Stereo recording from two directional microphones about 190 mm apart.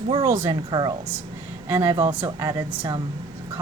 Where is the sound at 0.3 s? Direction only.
15° right (ahead or behind).